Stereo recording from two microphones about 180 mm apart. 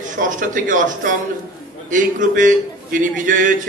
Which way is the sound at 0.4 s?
45° right (ahead or behind).